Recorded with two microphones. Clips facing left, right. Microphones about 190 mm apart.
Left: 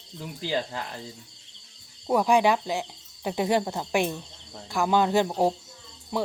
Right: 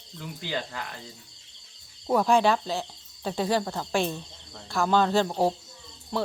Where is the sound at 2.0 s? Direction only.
10° left (ahead or behind).